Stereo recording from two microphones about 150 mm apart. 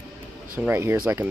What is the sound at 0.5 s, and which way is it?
Speech, 15° right (ahead or behind).